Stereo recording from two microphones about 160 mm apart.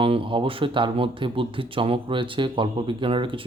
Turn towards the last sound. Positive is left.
turn(degrees=-30)  # may be behind; listen again after turning